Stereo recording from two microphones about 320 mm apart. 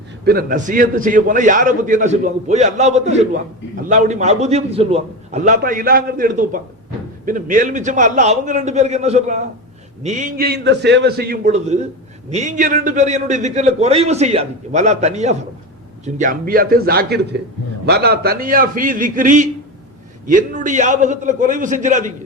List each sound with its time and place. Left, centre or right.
0.3 s a man's voice: right